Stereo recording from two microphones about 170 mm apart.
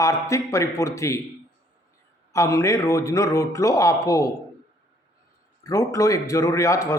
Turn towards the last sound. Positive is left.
turn(degrees=20)  # may be behind; listen again after turning